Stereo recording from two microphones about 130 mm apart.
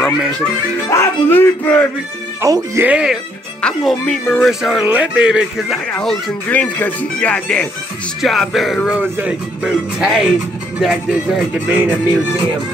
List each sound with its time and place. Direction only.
0.8 s speech: 20° left (ahead or behind)
2.4 s speech: 25° right (ahead or behind)
2.9 s speech: 5° right (ahead or behind)
3.6 s speech: 5° left (ahead or behind)
5.9 s speech: 5° left (ahead or behind); by 12.0 s 15° right (ahead or behind)